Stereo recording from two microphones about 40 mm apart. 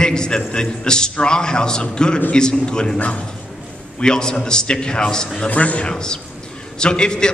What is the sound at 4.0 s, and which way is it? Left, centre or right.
A man's voice, centre.